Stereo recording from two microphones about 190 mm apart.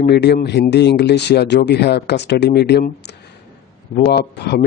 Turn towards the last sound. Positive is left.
turn(degrees=60)  # may be behind; listen again after turning